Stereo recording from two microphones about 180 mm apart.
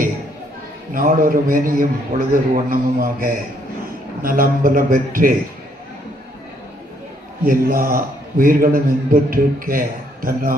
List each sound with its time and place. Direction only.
0.9 s a man's voice: 50° right (ahead or behind)
7.4 s a man's voice: 50° right (ahead or behind)